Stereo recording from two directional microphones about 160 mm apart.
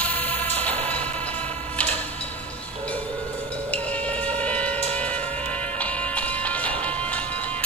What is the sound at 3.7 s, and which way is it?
Music, 10° left (ahead or behind).